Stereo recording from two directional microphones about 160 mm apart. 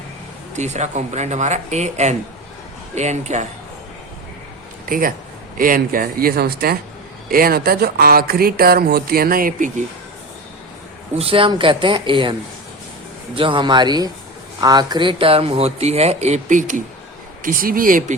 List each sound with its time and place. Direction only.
0.5 s speech: 45° right (ahead or behind)
4.9 s speech: 60° right (ahead or behind)
11.2 s speech: 35° right (ahead or behind)
13.3 s speech: 30° right (ahead or behind); by 18.2 s 60° right (ahead or behind)